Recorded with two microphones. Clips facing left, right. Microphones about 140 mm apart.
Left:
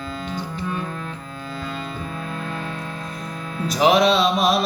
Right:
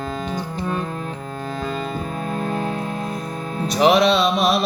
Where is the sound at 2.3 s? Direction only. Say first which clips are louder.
Right 9 dB; 40° right (ahead or behind).